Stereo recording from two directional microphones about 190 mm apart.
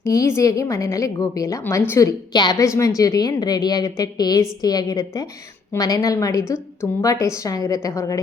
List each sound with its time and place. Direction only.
0.0 s a woman's voice: 15° left (ahead or behind)